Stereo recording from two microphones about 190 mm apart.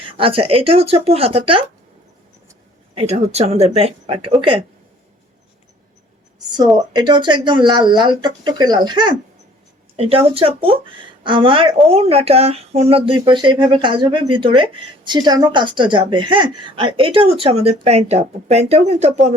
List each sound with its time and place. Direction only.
0.2 s speech: 30° right (ahead or behind)
2.9 s speech: 35° right (ahead or behind)
6.9 s speech: 25° right (ahead or behind)